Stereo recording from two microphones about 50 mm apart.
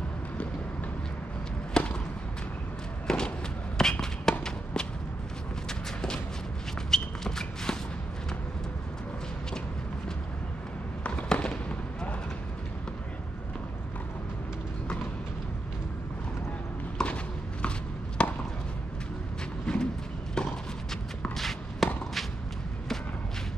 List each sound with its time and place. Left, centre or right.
1.7 s basketball bounce: left
3.1 s walk: centre
4.0 s run: centre
5.7 s a sound: centre
11.3 s fireworks: left
17.0 s a sound: left
19.6 s vehicle: centre
20.4 s walk: centre
21.4 s walk: centre